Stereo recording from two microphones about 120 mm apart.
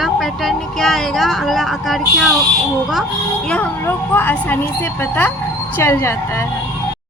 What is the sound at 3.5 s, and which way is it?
Speech, 15° left (ahead or behind).